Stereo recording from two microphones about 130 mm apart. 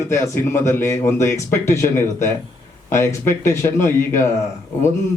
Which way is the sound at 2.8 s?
20° left (ahead or behind).